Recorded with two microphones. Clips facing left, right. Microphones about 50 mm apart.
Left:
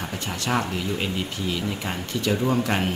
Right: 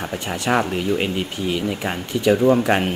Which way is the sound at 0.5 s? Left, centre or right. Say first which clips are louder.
Right 6 dB; right.